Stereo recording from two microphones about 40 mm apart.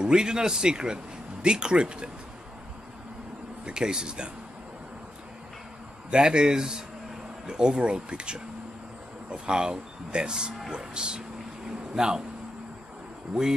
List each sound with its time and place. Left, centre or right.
0.0 s speech: centre
3.6 s speech: centre
6.0 s speech: right